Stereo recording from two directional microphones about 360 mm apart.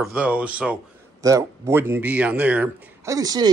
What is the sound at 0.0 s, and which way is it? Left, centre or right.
Speech, centre.